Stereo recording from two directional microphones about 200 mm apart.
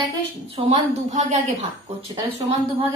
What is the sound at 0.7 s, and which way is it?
Speech, 35° right (ahead or behind).